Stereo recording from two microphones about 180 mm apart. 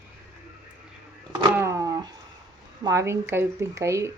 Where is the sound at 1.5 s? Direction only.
15° right (ahead or behind).